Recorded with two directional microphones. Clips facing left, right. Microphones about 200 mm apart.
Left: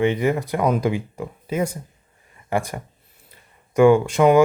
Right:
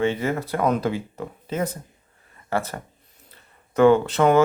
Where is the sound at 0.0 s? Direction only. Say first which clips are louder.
Left 3 dB; 15° left (ahead or behind).